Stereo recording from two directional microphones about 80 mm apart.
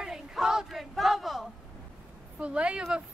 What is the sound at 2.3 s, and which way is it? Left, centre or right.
Speech, centre.